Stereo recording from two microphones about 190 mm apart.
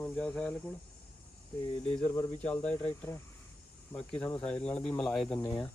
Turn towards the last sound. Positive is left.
turn(degrees=25)  # may be behind; listen again after turning